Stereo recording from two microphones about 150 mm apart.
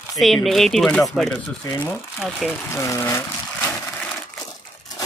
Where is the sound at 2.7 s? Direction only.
20° left (ahead or behind).